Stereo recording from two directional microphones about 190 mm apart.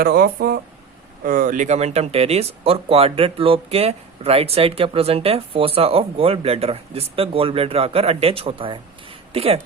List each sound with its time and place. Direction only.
0.0 s speech: 55° right (ahead or behind); by 9.6 s 30° right (ahead or behind)